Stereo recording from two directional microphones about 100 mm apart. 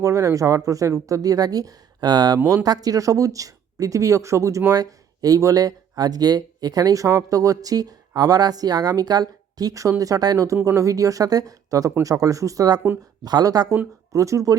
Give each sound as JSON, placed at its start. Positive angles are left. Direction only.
{"t": 0.0, "sound": "speech", "side_deg": -30}